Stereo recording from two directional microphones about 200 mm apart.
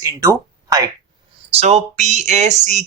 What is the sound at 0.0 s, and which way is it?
Speech, 15° right (ahead or behind).